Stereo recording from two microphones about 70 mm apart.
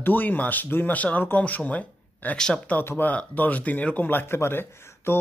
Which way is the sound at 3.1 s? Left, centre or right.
Left.